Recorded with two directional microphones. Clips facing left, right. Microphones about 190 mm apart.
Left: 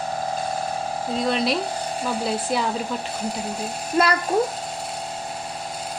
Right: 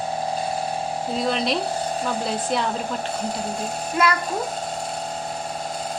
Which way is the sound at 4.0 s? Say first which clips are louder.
Left 1 dB; 35° left (ahead or behind).